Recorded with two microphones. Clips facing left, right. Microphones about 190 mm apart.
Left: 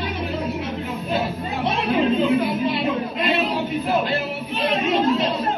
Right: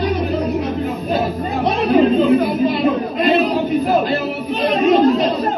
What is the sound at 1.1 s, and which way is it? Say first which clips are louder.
Chatter: right 4 dB; 40° right (ahead or behind).